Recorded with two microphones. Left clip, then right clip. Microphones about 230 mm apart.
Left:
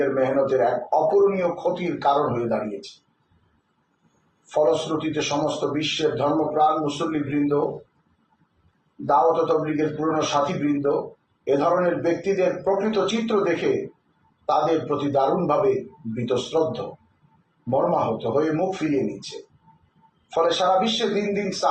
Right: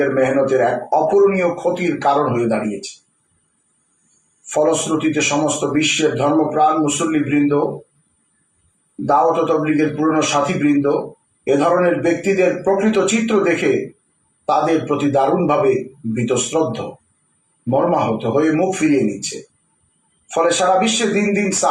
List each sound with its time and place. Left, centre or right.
0.0 s a man's voice: right
4.5 s a man's voice: right
9.0 s a man's voice: right